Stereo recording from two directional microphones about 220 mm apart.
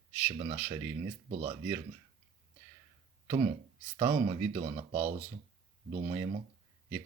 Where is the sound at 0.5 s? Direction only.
10° right (ahead or behind).